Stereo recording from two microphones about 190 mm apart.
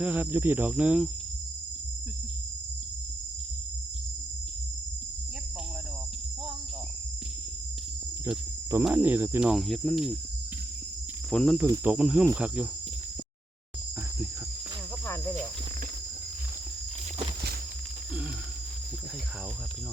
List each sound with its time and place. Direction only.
0.0 s speech: 10° right (ahead or behind)
8.2 s cricket: 15° right (ahead or behind)
11.3 s cricket: 5° left (ahead or behind)
11.5 s speech: 15° right (ahead or behind)
15.0 s cricket: 10° left (ahead or behind)